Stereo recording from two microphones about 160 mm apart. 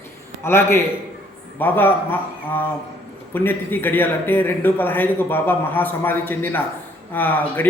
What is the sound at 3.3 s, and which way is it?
A man's voice, 10° left (ahead or behind).